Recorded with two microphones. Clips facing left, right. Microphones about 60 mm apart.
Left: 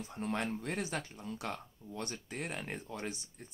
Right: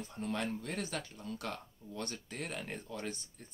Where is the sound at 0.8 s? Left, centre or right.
Centre.